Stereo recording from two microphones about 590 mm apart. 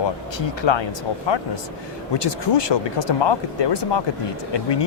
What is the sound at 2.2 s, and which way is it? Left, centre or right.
Speech, left.